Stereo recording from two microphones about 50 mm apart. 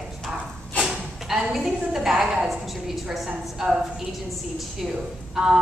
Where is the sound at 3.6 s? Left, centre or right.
Centre.